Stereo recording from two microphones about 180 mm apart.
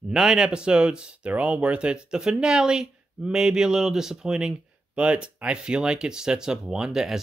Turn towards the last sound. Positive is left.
turn(degrees=0)  # may be behind; listen again after turning